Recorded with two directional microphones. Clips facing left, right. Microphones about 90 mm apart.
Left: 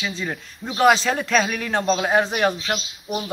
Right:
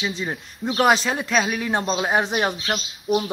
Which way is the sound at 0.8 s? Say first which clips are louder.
Left 2 dB; 10° right (ahead or behind).